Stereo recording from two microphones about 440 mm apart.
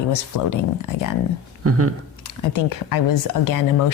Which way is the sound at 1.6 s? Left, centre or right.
Right.